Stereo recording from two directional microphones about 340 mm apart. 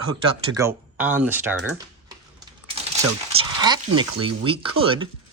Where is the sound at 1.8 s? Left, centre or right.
Centre.